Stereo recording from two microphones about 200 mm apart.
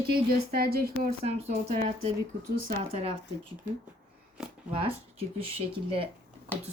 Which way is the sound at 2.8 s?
30° right (ahead or behind).